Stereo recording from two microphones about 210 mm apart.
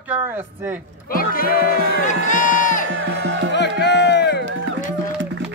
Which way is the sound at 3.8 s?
55° left (ahead or behind).